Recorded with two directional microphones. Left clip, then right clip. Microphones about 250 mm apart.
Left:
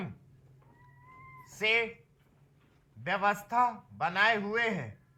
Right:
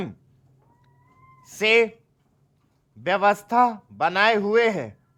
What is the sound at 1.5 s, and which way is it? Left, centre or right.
Speech, right.